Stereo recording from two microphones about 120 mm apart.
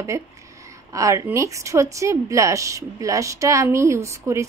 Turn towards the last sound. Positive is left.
turn(degrees=-25)  # may be behind; listen again after turning